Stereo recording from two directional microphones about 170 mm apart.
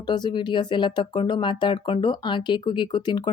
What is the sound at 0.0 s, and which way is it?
Speech, 25° left (ahead or behind).